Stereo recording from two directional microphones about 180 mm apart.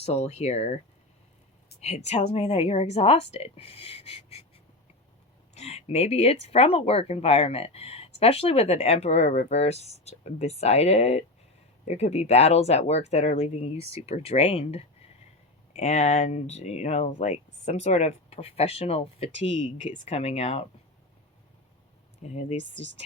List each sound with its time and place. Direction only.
0.0 s speech: 35° left (ahead or behind)
1.7 s a sound: 65° left (ahead or behind)
2.0 s speech: 35° left (ahead or behind)
5.5 s speech: 35° left (ahead or behind)
22.2 s speech: 40° left (ahead or behind)
22.6 s speech: 85° right